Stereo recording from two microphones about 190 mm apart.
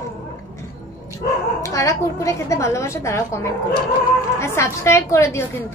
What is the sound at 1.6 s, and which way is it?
A woman's voice, 15° left (ahead or behind).